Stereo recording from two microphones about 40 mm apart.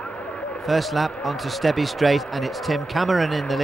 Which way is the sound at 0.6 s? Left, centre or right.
Centre.